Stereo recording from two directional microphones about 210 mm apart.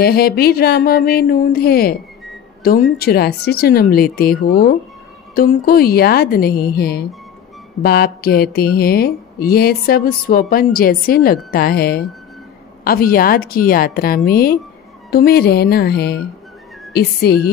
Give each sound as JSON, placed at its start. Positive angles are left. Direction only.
{"t": 0.0, "sound": "a woman's voice", "side_deg": 45}